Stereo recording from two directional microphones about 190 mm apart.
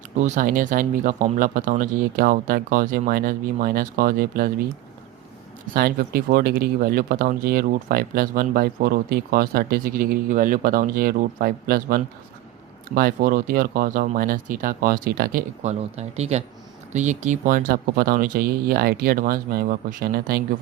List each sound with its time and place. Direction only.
0.2 s speech: 40° right (ahead or behind)
5.7 s speech: 50° right (ahead or behind)